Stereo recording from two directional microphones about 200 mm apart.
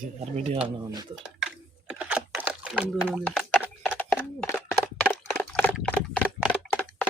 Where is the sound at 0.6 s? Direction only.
15° right (ahead or behind).